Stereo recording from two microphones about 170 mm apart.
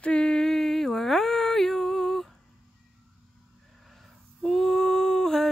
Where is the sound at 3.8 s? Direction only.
Centre (ahead or behind).